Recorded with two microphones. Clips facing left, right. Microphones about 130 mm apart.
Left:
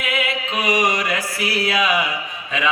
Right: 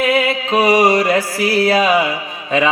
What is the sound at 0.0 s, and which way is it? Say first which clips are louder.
Mantra: right 8 dB; 35° right (ahead or behind).